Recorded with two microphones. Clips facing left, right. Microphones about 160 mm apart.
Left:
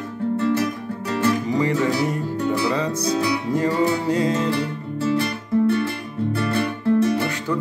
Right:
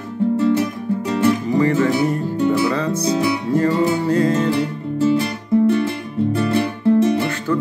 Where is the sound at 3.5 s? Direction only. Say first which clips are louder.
Right 3 dB; 15° left (ahead or behind).